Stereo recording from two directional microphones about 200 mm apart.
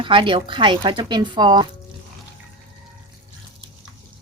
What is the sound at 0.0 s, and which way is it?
Speech, 25° right (ahead or behind).